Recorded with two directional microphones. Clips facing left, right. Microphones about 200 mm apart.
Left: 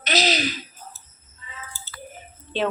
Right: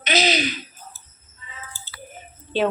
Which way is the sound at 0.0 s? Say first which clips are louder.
Right 2 dB; centre (ahead or behind).